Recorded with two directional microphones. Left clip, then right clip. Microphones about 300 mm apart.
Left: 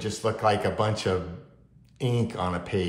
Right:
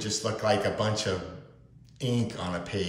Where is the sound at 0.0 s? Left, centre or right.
Centre.